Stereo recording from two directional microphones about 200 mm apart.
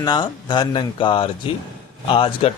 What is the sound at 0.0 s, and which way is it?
Speech, 20° left (ahead or behind).